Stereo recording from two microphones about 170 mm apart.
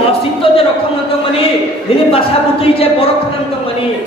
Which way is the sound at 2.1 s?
35° left (ahead or behind).